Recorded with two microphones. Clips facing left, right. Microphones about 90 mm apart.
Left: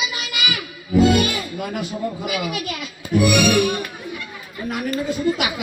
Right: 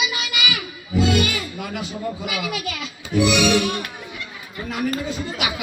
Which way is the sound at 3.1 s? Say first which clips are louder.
Left 1 dB; 50° left (ahead or behind).